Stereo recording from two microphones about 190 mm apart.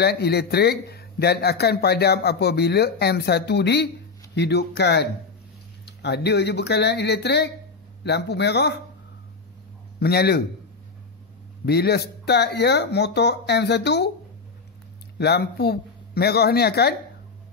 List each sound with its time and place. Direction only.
0.0 s a man's voice: 60° left (ahead or behind)
9.9 s a man's voice: 55° left (ahead or behind)
11.6 s a man's voice: 60° left (ahead or behind)
15.1 s a man's voice: 60° left (ahead or behind)